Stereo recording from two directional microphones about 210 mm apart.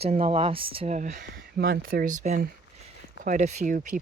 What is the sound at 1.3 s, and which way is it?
Speech, 45° right (ahead or behind).